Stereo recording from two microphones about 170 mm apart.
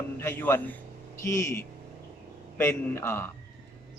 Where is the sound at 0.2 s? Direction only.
10° left (ahead or behind).